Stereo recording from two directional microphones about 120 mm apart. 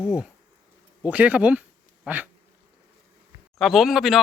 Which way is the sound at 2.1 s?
15° right (ahead or behind).